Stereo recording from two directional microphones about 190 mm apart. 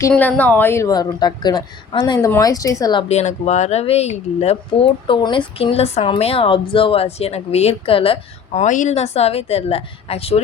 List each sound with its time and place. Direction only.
0.1 s speech: 10° left (ahead or behind); by 10.4 s 30° left (ahead or behind)